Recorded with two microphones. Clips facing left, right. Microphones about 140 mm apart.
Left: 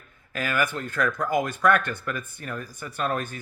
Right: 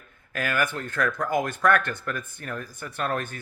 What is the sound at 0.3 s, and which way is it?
A man's voice, 55° right (ahead or behind).